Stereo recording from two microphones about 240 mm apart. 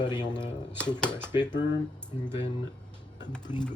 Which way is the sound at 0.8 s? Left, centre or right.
Centre.